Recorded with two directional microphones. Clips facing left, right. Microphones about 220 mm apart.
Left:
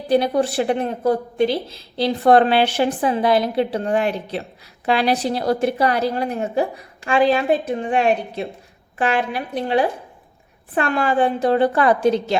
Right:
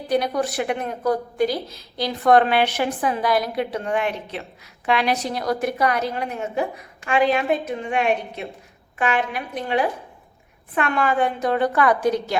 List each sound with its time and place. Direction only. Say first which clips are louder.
0.1 s a woman's voice: left 4 dB; 30° left (ahead or behind)